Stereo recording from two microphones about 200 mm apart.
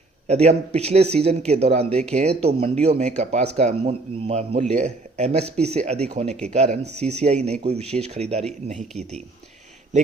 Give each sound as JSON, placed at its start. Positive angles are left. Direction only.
{"t": 0.3, "sound": "a man's voice", "side_deg": -30}